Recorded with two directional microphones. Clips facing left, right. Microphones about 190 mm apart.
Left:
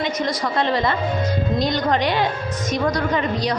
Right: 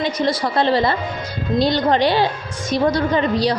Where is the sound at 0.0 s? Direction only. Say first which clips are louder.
Right 3 dB; 35° right (ahead or behind).